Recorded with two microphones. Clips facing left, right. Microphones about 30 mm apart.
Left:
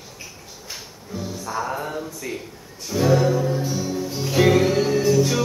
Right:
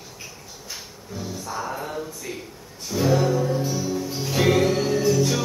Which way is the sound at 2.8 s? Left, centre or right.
Centre.